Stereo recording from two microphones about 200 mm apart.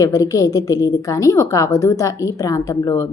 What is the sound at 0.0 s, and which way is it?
A woman's voice, 15° left (ahead or behind).